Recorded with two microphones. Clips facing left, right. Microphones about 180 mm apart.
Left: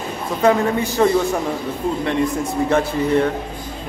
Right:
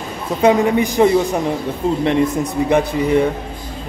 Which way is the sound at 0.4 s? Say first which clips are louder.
Right 3 dB; 15° right (ahead or behind).